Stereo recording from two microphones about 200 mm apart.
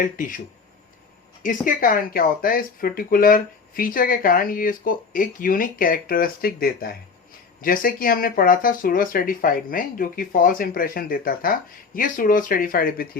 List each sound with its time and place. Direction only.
0.0 s speech: 40° left (ahead or behind)